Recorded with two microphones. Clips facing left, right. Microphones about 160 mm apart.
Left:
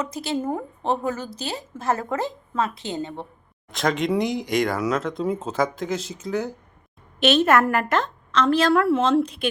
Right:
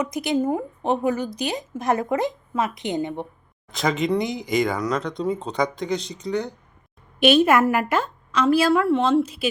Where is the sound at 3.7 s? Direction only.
Centre (ahead or behind).